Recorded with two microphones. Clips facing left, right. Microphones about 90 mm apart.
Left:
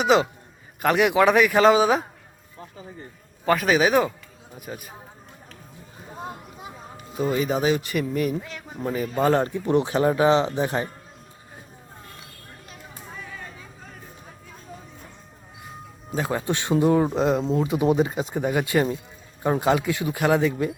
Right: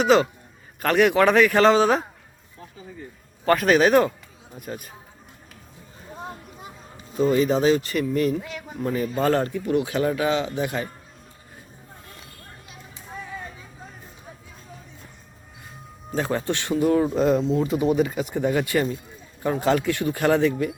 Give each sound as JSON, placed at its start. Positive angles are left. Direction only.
{"t": 0.0, "sound": "a man's voice", "side_deg": 15}
{"t": 3.4, "sound": "speech", "side_deg": 5}
{"t": 7.2, "sound": "a man's voice", "side_deg": 10}
{"t": 8.4, "sound": "speech", "side_deg": -5}
{"t": 8.7, "sound": "speech", "side_deg": 10}
{"t": 16.1, "sound": "a man's voice", "side_deg": 10}